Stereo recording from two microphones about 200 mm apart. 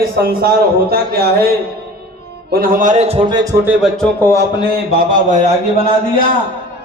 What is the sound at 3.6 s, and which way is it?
Speech, 5° right (ahead or behind).